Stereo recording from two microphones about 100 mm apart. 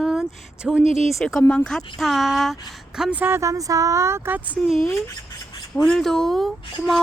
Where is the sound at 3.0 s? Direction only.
15° right (ahead or behind).